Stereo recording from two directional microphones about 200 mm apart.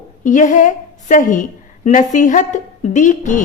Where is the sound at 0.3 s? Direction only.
40° left (ahead or behind).